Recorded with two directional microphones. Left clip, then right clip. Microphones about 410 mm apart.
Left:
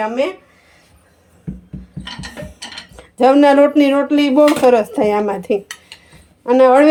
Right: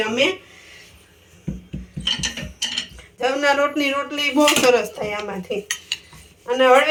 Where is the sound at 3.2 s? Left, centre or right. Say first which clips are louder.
Left 9 dB; centre.